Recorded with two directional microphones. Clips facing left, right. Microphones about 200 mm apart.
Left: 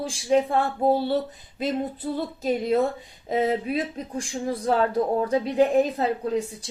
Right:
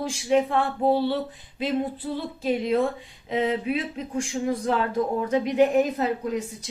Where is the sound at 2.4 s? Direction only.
40° left (ahead or behind).